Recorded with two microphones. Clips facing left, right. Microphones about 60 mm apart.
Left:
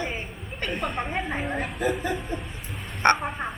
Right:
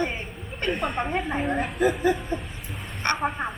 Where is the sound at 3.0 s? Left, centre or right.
Left.